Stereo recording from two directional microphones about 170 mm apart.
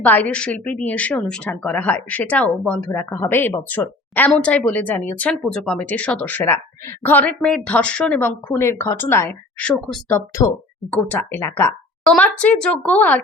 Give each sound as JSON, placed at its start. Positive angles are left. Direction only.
{"t": 0.0, "sound": "a woman's voice", "side_deg": 10}
{"t": 10.1, "sound": "a woman's voice", "side_deg": 15}